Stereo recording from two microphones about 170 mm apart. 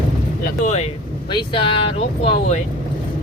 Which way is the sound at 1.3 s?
30° left (ahead or behind).